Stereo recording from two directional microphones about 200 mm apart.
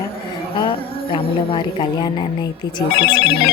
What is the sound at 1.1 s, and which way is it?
A woman's voice, 25° left (ahead or behind).